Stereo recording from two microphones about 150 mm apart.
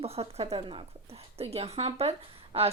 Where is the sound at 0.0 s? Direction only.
40° right (ahead or behind).